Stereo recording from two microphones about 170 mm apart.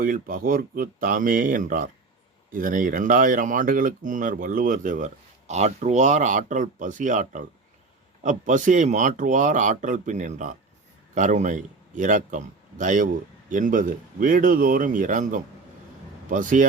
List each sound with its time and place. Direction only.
0.0 s speech: 55° right (ahead or behind)